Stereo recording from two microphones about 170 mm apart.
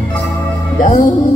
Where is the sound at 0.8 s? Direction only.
50° left (ahead or behind).